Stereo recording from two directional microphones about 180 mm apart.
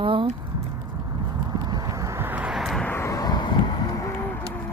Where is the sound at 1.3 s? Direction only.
20° right (ahead or behind); by 2.9 s centre (ahead or behind).